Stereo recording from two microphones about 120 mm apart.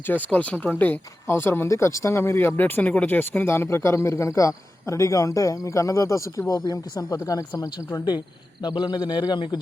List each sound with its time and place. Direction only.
0.0 s a man's voice: 15° left (ahead or behind); by 9.6 s 35° left (ahead or behind)